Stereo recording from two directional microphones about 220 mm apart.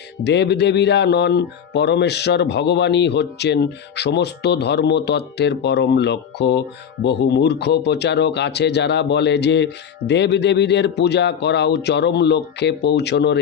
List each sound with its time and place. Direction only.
0.3 s speech: 50° left (ahead or behind)